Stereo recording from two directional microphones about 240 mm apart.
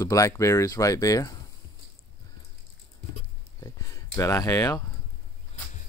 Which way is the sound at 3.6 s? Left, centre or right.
Centre.